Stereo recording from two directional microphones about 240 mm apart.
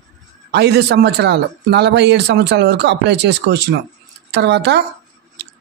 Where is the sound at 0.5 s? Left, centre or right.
Right.